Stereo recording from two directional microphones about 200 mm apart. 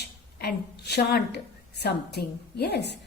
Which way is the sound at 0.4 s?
55° left (ahead or behind).